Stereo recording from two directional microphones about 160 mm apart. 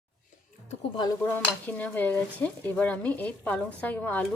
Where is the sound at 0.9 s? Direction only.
25° left (ahead or behind).